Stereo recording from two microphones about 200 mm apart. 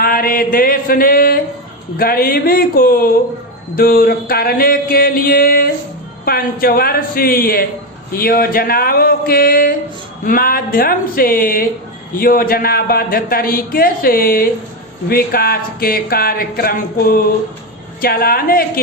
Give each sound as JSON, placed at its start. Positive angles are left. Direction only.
{"t": 0.0, "sound": "a man's voice", "side_deg": 45}